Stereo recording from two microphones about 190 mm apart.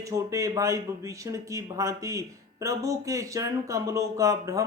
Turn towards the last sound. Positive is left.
turn(degrees=-15)  # may be behind; listen again after turning